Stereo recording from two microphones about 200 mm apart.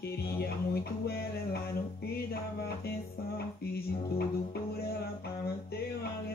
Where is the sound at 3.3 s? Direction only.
50° left (ahead or behind).